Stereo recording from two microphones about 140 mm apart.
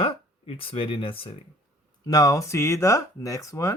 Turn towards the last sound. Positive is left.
turn(degrees=20)  # may be behind; listen again after turning